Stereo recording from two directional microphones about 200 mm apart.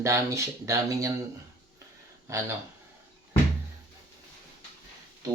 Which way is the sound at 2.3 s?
15° right (ahead or behind).